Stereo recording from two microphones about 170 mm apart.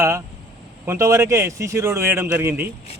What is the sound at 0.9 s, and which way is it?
Speech, 15° right (ahead or behind).